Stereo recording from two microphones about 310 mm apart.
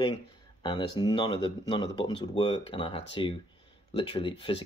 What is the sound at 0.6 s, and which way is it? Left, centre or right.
Speech, centre.